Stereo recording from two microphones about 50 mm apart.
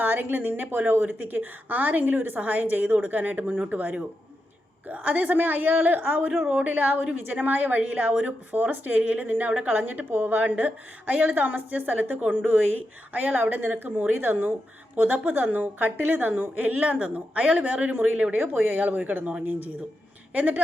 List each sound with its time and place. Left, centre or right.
0.0 s a woman's voice: right
18.3 s a woman's voice: right